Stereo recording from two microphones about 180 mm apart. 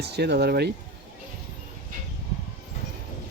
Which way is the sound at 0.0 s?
65° right (ahead or behind).